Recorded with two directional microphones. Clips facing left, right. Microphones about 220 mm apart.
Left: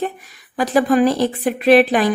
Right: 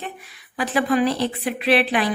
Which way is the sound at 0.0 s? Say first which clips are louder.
Left 10 dB; 45° left (ahead or behind).